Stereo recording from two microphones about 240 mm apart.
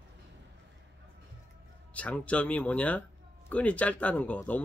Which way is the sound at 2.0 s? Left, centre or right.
Centre.